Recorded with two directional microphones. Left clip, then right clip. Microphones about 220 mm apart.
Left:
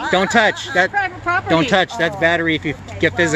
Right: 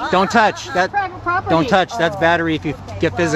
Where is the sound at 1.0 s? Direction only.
35° left (ahead or behind).